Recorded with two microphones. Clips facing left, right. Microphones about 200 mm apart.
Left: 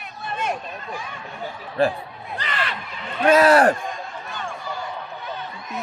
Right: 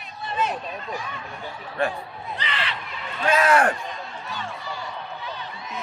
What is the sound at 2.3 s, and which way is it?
Crow, 45° left (ahead or behind).